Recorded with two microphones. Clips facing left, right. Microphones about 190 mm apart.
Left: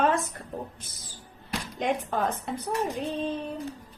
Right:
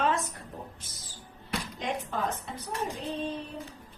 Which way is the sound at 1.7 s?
60° left (ahead or behind).